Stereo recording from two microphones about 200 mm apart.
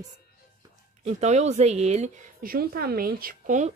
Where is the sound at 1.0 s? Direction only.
35° right (ahead or behind).